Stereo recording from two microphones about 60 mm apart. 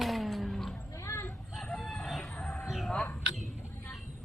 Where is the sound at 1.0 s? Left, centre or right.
Left.